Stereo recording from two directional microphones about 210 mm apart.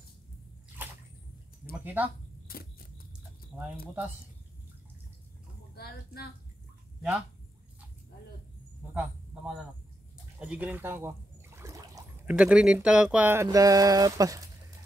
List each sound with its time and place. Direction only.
0.8 s bathtub: 10° right (ahead or behind)
2.4 s a sound: 45° left (ahead or behind)
5.8 s speech: 50° left (ahead or behind)
7.0 s speech: 5° right (ahead or behind)
8.9 s a man's voice: 5° right (ahead or behind)
10.4 s a sound: 5° right (ahead or behind)
12.4 s speech: 5° right (ahead or behind)